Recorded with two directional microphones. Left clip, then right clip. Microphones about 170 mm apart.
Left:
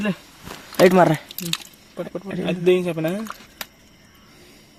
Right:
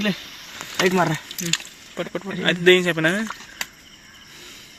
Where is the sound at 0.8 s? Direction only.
70° left (ahead or behind).